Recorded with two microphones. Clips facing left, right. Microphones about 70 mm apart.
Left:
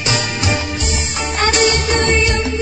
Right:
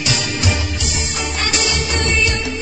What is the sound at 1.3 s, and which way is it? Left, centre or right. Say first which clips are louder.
Music: left 7 dB; left.